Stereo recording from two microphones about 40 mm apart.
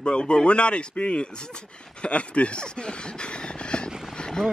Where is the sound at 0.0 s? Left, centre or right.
Left.